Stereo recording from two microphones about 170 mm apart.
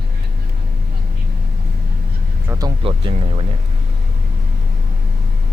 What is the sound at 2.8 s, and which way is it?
Speech, 30° right (ahead or behind).